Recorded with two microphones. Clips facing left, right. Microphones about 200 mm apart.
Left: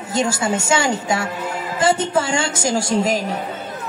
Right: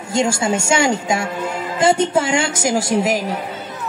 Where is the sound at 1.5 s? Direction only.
15° right (ahead or behind).